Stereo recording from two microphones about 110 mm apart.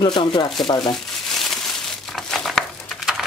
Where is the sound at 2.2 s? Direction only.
5° left (ahead or behind).